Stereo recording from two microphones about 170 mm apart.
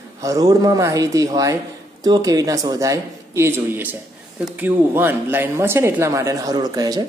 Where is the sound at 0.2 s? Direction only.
20° right (ahead or behind).